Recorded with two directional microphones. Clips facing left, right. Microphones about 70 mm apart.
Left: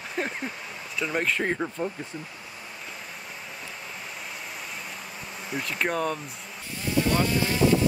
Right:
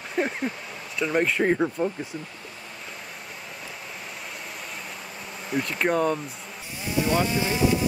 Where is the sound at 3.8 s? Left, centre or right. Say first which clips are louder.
Even; centre.